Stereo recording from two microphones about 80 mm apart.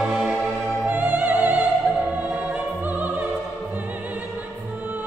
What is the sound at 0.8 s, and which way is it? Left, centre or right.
Music, right.